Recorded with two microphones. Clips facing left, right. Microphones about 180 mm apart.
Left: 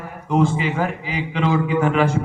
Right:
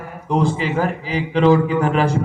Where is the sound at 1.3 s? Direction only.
35° right (ahead or behind).